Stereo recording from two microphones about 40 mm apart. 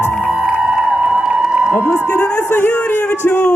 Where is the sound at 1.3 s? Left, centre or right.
Right.